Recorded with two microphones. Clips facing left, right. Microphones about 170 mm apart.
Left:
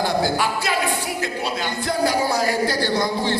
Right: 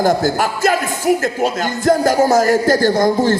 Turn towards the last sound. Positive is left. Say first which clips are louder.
# right 8 dB
turn(degrees=-45)  # may be behind; listen again after turning